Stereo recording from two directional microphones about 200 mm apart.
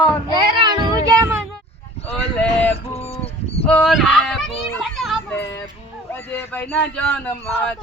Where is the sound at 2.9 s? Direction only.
30° left (ahead or behind).